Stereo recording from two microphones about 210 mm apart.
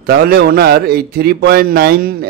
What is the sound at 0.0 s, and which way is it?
A man's voice, 45° right (ahead or behind).